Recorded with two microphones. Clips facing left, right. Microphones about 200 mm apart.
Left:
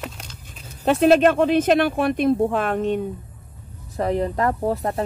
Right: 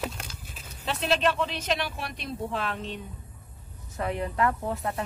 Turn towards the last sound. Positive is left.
turn(degrees=35)  # may be behind; listen again after turning